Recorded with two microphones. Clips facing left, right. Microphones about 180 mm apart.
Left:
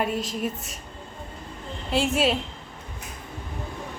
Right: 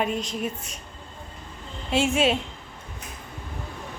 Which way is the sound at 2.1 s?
Centre (ahead or behind).